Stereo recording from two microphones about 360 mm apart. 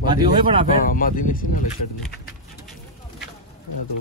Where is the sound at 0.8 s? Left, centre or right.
Left.